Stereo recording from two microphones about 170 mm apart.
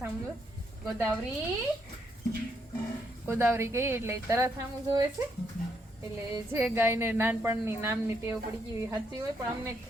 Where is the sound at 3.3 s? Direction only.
15° right (ahead or behind).